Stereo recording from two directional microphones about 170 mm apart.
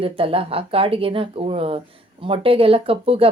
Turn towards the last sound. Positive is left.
turn(degrees=-35)  # may be behind; listen again after turning